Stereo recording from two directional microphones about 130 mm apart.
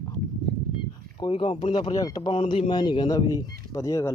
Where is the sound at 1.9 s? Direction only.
30° left (ahead or behind).